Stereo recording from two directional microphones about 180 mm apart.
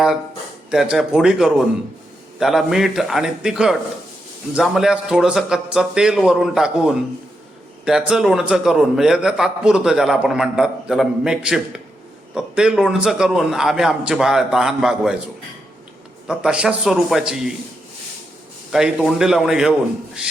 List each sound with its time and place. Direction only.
0.7 s a man's voice: 5° right (ahead or behind)
16.2 s a man's voice: 5° right (ahead or behind)
18.7 s a man's voice: centre (ahead or behind)